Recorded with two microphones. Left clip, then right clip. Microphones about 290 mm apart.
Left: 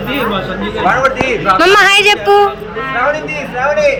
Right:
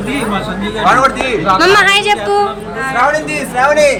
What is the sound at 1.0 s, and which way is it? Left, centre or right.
Speech, right.